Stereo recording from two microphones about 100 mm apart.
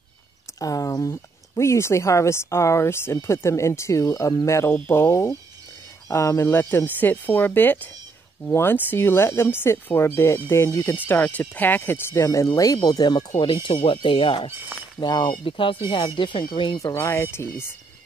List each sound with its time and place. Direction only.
0.6 s speech: 35° left (ahead or behind)
1.5 s speech: 30° left (ahead or behind)
11.1 s speech: 15° left (ahead or behind)
12.3 s speech: 35° left (ahead or behind); by 14.5 s 60° left (ahead or behind)
15.0 s speech: 45° left (ahead or behind)
16.7 s speech: 35° left (ahead or behind)